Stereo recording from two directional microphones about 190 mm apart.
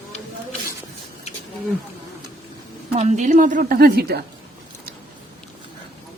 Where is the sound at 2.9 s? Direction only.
40° right (ahead or behind); by 4.2 s 55° right (ahead or behind).